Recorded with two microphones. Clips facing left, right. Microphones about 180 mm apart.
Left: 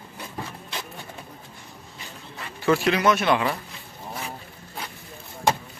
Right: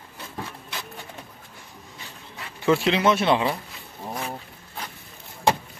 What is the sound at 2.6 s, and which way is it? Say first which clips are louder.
Speech: even; 20° right (ahead or behind).